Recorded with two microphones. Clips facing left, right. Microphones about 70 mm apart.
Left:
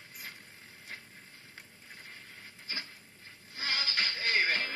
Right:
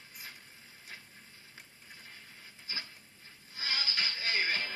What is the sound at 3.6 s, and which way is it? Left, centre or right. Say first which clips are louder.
Music: left 2 dB; left.